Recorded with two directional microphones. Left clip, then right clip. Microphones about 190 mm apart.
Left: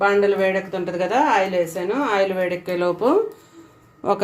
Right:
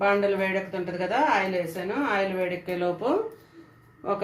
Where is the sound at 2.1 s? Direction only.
50° left (ahead or behind).